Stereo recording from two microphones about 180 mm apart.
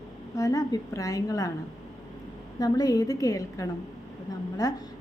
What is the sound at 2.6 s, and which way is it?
A woman's voice, 20° left (ahead or behind).